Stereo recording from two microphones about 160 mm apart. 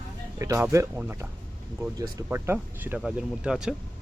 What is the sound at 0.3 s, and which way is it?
Speech, 15° right (ahead or behind).